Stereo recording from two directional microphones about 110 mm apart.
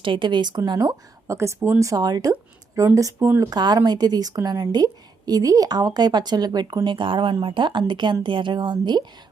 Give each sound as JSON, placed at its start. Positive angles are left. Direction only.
{"t": 0.0, "sound": "a woman's voice", "side_deg": -45}
{"t": 3.2, "sound": "speech", "side_deg": -20}
{"t": 3.4, "sound": "a woman's voice", "side_deg": -40}